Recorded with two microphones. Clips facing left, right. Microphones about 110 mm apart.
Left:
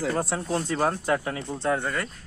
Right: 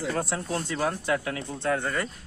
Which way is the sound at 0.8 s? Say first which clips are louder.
Left 1 dB; 35° left (ahead or behind).